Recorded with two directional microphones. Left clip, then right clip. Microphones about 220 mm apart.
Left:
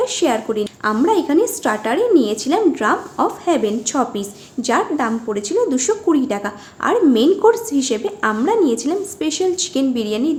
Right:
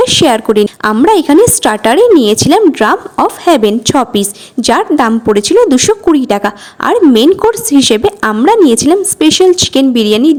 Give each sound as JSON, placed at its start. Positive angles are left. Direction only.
{"t": 0.0, "sound": "a woman's voice", "side_deg": -40}